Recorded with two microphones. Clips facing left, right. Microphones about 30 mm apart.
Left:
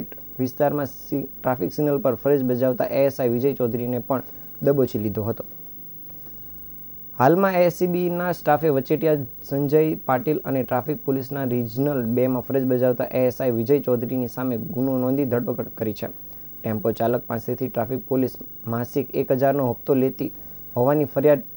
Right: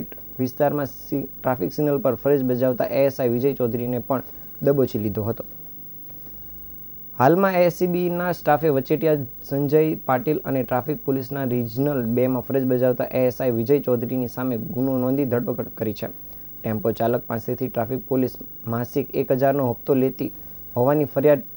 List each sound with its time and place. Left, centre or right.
0.0 s speech: centre
7.2 s speech: centre